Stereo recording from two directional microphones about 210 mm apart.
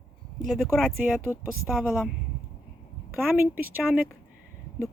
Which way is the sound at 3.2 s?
10° right (ahead or behind).